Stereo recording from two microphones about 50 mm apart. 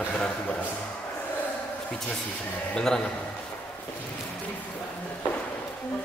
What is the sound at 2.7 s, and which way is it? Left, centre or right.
Speech, centre.